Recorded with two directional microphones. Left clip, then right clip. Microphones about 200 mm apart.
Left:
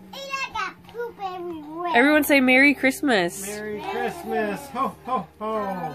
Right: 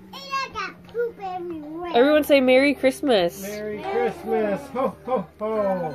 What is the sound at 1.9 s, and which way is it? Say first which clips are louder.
Speech: right 1 dB; 90° left.